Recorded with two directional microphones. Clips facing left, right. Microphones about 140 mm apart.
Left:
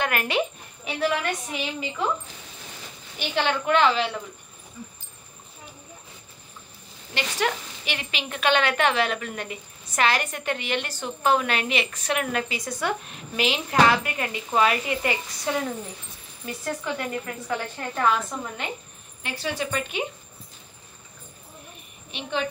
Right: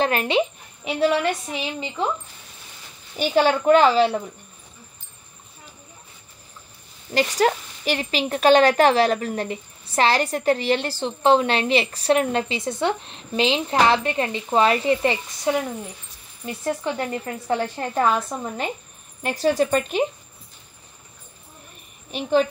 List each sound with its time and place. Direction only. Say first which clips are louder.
0.0 s speech: right 5 dB; 25° right (ahead or behind)
3.2 s a woman's voice: right 7 dB; 40° right (ahead or behind)
7.2 s a woman's voice: right 7 dB; 40° right (ahead or behind)
22.1 s a woman's voice: right 9 dB; 40° right (ahead or behind)